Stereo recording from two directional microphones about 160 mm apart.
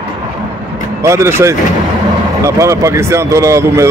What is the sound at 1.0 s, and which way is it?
Speech, 15° right (ahead or behind).